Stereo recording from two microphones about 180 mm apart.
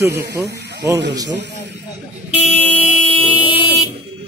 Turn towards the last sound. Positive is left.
turn(degrees=30)  # may be behind; listen again after turning